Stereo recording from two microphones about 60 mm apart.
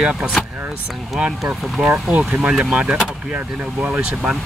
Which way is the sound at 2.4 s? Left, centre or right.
Centre.